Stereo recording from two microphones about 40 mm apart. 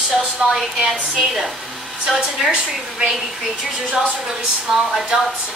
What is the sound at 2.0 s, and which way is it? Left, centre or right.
Speech, centre.